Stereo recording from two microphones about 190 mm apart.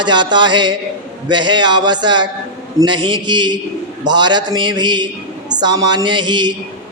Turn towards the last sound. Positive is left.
turn(degrees=-25)  # may be behind; listen again after turning